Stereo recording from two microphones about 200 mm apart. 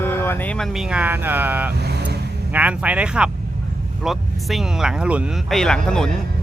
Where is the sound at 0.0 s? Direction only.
10° left (ahead or behind).